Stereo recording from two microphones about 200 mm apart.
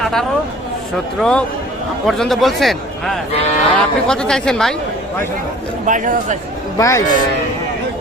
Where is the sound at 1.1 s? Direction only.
5° left (ahead or behind).